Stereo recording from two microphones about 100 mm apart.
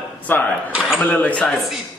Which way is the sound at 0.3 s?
20° left (ahead or behind).